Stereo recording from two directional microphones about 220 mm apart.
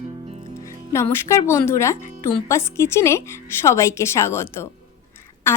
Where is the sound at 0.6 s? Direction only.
15° left (ahead or behind).